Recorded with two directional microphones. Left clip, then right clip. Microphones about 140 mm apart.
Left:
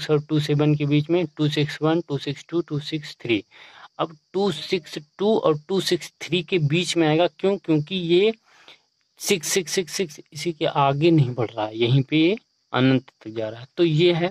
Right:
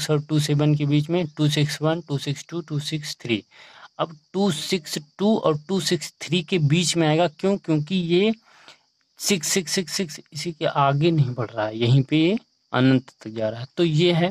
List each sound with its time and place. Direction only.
0.0 s speech: 30° right (ahead or behind)